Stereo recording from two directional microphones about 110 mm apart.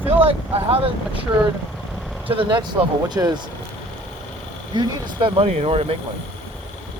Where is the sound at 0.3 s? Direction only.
65° right (ahead or behind).